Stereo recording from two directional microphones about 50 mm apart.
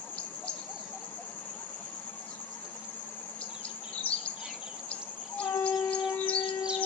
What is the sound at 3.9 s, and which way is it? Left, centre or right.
Insect, left.